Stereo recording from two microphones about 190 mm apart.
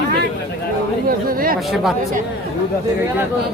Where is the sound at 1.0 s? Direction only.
50° right (ahead or behind).